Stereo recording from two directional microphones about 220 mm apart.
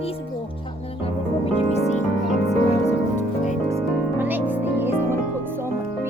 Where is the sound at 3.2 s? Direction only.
35° left (ahead or behind).